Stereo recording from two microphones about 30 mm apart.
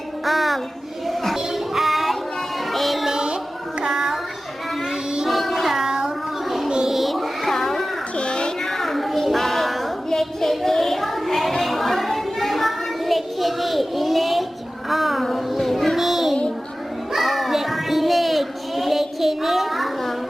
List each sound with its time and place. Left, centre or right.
0.3 s music: centre
1.0 s a sound: centre
1.5 s music: centre
3.1 s music: right
3.8 s child singing: right
5.3 s child singing: centre
6.7 s child singing: right
6.9 s cat: centre
8.1 s a sound: left
8.6 s child singing: centre
10.1 s a sound: centre
14.8 s child singing: centre
17.1 s a sound: centre